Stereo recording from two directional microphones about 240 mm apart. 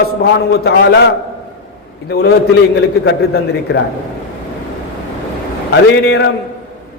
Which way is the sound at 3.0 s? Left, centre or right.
Left.